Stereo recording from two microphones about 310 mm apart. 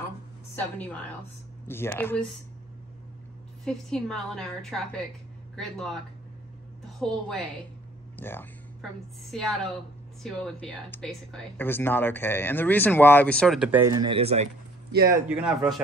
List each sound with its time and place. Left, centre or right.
1.7 s speech: centre
3.6 s speech: centre
7.0 s speech: centre; by 15.1 s right
15.1 s speech: centre